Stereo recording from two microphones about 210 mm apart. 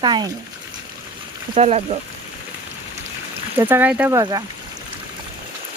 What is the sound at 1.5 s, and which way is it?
Speech, 30° right (ahead or behind).